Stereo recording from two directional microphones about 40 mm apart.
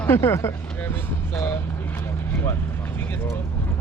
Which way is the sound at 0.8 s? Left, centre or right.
Left.